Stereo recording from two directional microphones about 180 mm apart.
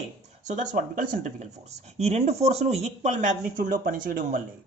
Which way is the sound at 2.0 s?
35° right (ahead or behind).